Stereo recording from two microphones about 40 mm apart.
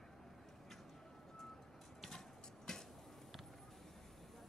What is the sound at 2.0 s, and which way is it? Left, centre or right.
Vehicle, centre.